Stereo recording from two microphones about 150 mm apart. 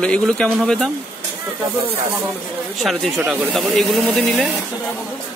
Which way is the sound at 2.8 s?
Centre (ahead or behind).